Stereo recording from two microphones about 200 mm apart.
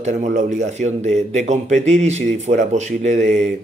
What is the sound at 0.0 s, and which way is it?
Speech, 40° right (ahead or behind).